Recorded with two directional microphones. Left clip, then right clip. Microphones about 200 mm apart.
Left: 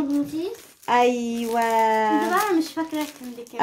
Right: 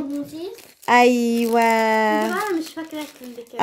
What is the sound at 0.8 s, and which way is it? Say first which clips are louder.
A woman's voice: right 4 dB; 60° right (ahead or behind).